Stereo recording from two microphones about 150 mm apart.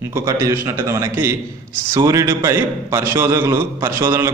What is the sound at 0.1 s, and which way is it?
A man's voice, 20° right (ahead or behind).